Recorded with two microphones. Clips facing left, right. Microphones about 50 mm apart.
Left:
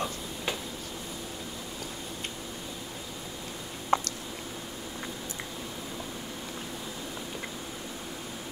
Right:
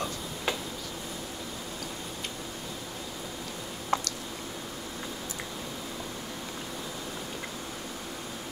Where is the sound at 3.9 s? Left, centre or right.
Left.